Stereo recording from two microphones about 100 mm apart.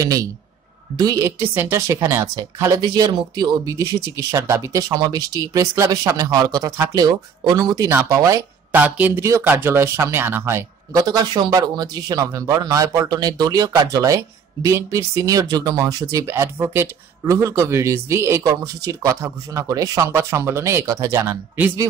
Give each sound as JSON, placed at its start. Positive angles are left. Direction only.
{"t": 0.0, "sound": "a man's voice", "side_deg": -35}
{"t": 1.2, "sound": "speech", "side_deg": -20}
{"t": 2.8, "sound": "a man's voice", "side_deg": -40}
{"t": 8.7, "sound": "speech", "side_deg": -15}
{"t": 9.2, "sound": "a man's voice", "side_deg": -30}
{"t": 10.9, "sound": "a man's voice", "side_deg": -40}